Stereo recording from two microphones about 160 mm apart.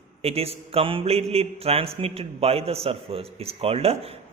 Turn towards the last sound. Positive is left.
turn(degrees=-40)  # may be behind; listen again after turning